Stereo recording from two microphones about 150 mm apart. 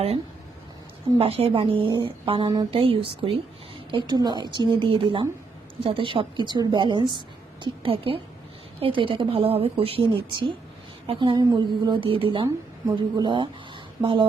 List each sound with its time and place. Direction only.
1.2 s a woman's voice: 40° right (ahead or behind)